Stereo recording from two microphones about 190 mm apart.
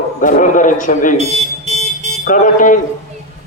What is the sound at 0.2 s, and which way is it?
Speech, 45° left (ahead or behind).